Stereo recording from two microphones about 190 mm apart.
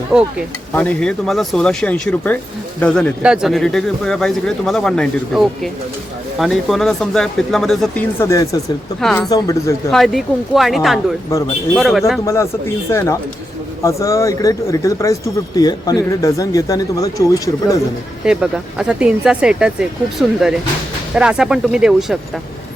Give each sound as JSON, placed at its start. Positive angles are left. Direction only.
{"t": 0.1, "sound": "speech", "side_deg": -5}
{"t": 0.7, "sound": "speech", "side_deg": 5}
{"t": 8.2, "sound": "speech", "side_deg": 15}
{"t": 9.0, "sound": "speech", "side_deg": 0}
{"t": 9.3, "sound": "speech", "side_deg": 20}
{"t": 9.9, "sound": "speech", "side_deg": 0}
{"t": 12.2, "sound": "speech", "side_deg": 15}
{"t": 18.3, "sound": "speech", "side_deg": -5}